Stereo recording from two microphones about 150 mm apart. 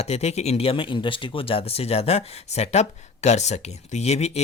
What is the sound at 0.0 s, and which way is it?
Speech, 45° left (ahead or behind).